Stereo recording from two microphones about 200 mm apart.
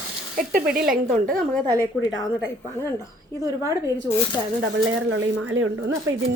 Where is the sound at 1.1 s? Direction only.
5° left (ahead or behind).